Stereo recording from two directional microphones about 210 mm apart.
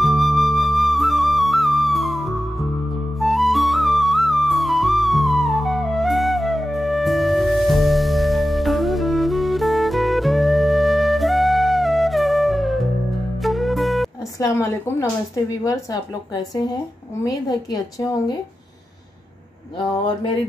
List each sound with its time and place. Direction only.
0.0 s flute: centre (ahead or behind)
3.2 s music: centre (ahead or behind)
14.4 s speech: 10° left (ahead or behind)
17.2 s speech: 20° left (ahead or behind)